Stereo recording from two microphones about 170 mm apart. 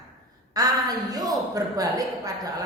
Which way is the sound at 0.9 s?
20° right (ahead or behind).